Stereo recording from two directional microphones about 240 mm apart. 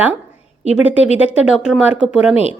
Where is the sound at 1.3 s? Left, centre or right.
Centre.